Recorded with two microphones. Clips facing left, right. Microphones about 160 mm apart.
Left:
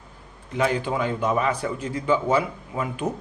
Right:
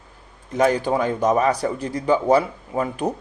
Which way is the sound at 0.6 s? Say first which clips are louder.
Right 5 dB; 40° right (ahead or behind).